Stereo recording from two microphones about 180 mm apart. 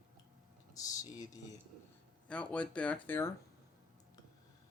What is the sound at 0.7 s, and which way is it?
Speech, 20° left (ahead or behind).